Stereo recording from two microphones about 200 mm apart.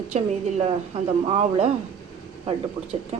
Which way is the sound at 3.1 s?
30° right (ahead or behind).